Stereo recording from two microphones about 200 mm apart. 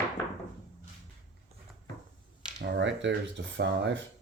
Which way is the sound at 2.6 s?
65° right (ahead or behind).